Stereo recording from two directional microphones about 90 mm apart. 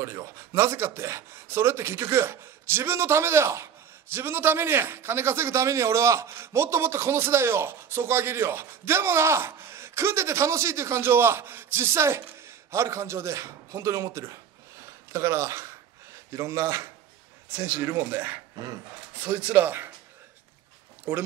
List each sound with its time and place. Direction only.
0.0 s a man's voice: 30° right (ahead or behind)
21.1 s a man's voice: 20° right (ahead or behind)